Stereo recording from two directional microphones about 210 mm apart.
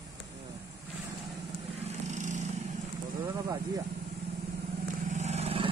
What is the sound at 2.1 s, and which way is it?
Vehicle, 35° right (ahead or behind).